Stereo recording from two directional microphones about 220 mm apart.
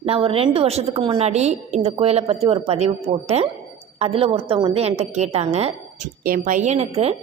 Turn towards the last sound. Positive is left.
turn(degrees=-30)  # may be behind; listen again after turning